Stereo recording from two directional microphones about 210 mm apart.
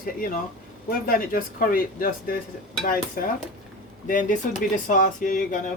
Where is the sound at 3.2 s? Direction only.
45° left (ahead or behind).